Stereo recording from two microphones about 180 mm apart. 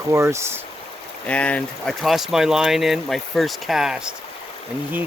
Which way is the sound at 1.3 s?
5° left (ahead or behind).